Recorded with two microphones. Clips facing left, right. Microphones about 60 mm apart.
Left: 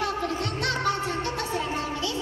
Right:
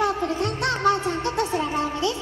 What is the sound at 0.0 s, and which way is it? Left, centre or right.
Music, right.